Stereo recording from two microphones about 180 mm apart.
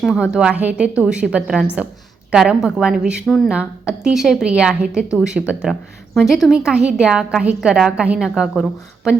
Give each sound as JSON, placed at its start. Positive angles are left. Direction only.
{"t": 0.0, "sound": "a woman's voice", "side_deg": -5}